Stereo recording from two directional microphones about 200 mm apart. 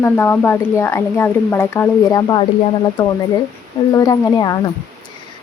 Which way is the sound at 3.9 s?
15° left (ahead or behind).